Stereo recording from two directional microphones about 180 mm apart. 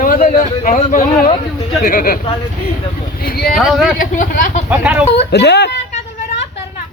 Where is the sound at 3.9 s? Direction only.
45° left (ahead or behind).